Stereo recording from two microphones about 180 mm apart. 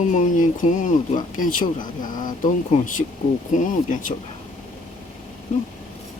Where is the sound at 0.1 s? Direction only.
45° left (ahead or behind).